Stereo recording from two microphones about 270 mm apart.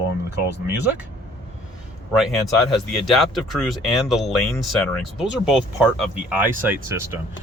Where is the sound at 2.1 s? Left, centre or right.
Centre.